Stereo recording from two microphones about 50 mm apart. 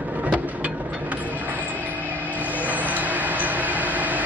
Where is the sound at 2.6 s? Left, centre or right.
Right.